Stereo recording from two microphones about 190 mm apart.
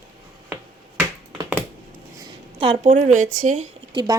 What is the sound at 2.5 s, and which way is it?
Speech, 30° right (ahead or behind).